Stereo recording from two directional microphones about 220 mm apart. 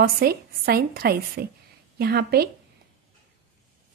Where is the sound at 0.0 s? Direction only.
45° right (ahead or behind).